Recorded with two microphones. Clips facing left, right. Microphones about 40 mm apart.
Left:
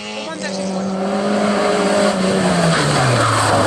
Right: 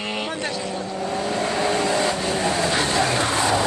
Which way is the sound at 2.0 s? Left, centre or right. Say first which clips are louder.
Left 6 dB; left.